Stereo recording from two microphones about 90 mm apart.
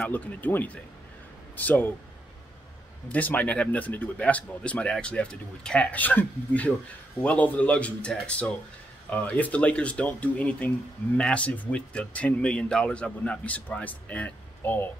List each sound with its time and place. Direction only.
0.0 s speech: 20° left (ahead or behind)
3.1 s speech: 15° left (ahead or behind)